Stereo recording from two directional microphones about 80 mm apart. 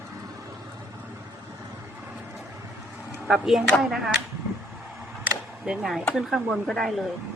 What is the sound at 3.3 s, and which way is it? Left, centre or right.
Speech, centre.